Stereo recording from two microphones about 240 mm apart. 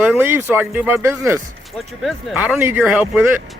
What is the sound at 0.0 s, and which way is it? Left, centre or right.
Speech, centre.